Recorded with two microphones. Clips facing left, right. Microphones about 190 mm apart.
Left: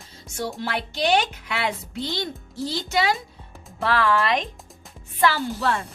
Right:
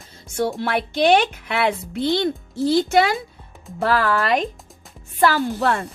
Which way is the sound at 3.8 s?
45° right (ahead or behind).